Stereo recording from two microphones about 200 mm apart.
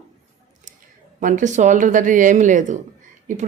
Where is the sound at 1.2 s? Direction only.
40° right (ahead or behind).